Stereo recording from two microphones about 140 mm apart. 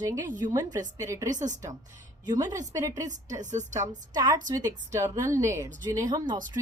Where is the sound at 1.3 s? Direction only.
60° right (ahead or behind).